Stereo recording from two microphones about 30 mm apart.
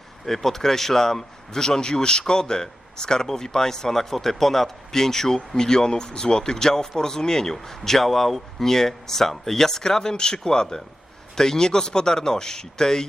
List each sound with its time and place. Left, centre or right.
0.4 s a man's voice: centre
7.5 s a man's voice: centre